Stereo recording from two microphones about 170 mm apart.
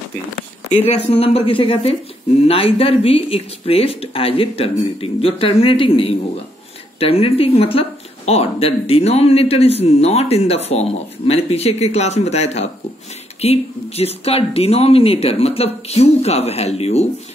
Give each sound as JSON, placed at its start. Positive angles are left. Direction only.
{"t": 0.4, "sound": "speech", "side_deg": 35}